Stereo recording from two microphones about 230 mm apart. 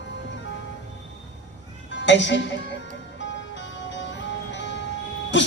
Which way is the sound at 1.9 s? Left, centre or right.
Left.